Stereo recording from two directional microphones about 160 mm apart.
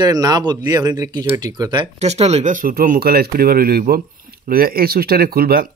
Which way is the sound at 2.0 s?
40° right (ahead or behind).